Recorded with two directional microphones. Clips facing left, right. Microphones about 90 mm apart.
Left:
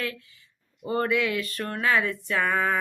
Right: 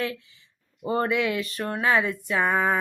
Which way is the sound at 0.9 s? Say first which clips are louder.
Right 1 dB; 25° right (ahead or behind).